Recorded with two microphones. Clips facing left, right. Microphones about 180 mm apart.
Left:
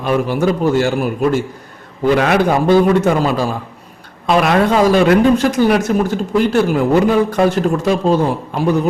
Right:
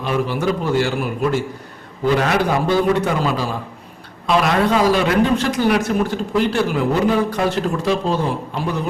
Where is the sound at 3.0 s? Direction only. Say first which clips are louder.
Left 5 dB; 45° left (ahead or behind).